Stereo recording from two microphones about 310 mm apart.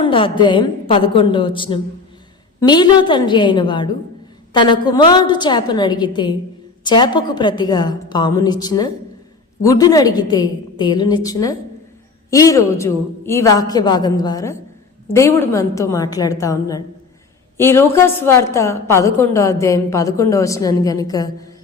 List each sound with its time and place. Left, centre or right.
0.0 s a woman's voice: centre